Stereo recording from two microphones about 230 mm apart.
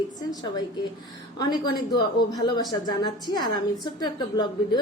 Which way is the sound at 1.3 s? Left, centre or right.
Centre.